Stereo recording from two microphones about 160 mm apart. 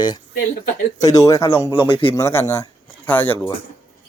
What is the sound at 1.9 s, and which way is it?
Speech, 35° left (ahead or behind).